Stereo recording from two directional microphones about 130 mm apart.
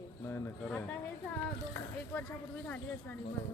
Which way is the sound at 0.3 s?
20° left (ahead or behind).